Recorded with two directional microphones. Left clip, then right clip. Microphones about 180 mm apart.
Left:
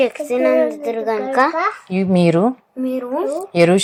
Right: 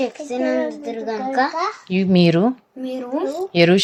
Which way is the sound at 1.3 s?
20° left (ahead or behind).